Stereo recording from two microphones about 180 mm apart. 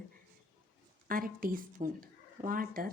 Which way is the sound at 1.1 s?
50° right (ahead or behind).